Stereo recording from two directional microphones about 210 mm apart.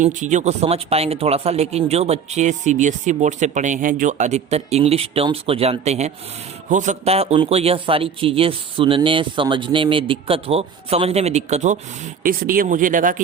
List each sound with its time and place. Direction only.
0.0 s a man's voice: 35° right (ahead or behind)